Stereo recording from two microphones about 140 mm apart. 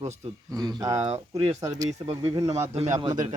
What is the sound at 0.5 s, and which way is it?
Speech, 25° right (ahead or behind).